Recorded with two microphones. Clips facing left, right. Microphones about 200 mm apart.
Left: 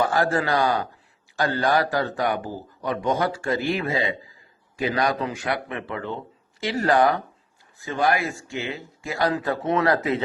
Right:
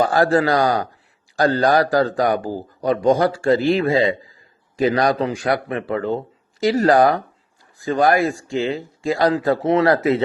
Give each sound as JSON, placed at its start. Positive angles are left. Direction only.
{"t": 0.0, "sound": "a man's voice", "side_deg": -35}